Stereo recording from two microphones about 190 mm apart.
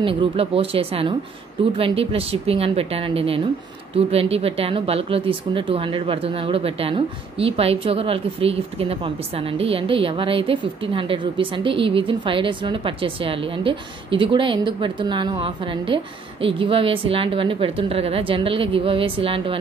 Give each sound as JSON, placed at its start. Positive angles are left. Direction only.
{"t": 0.0, "sound": "speech", "side_deg": -30}